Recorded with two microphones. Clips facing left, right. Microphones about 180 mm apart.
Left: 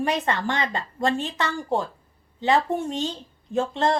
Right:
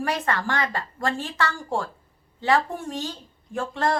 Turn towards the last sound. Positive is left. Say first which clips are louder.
# left 3 dB
turn(degrees=20)  # may be behind; listen again after turning